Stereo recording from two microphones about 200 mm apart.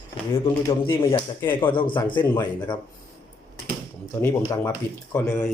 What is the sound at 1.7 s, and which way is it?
A man's voice, 25° left (ahead or behind).